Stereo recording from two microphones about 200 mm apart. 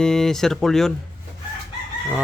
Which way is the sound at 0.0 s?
Centre (ahead or behind).